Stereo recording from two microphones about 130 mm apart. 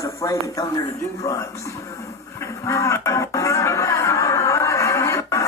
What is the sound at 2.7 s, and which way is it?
Music, 25° left (ahead or behind).